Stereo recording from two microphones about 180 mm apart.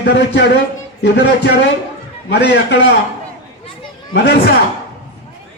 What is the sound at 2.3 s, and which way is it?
Speech, 70° left (ahead or behind).